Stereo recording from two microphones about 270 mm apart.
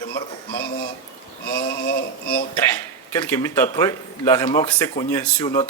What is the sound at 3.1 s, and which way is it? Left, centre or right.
A man's voice, centre.